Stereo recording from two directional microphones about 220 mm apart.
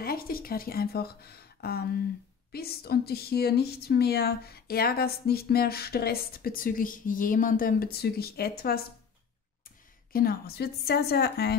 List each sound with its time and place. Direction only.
0.0 s speech: 40° left (ahead or behind)
10.1 s speech: 45° left (ahead or behind)